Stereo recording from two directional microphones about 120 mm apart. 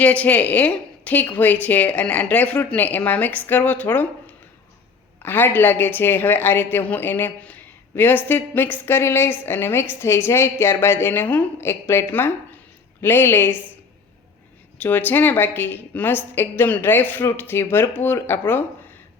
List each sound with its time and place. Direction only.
0.0 s a woman's voice: 10° left (ahead or behind)
5.2 s a woman's voice: 15° left (ahead or behind)
14.8 s a woman's voice: 15° left (ahead or behind)